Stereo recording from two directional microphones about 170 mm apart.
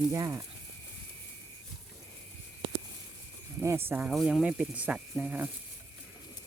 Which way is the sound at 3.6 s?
15° right (ahead or behind).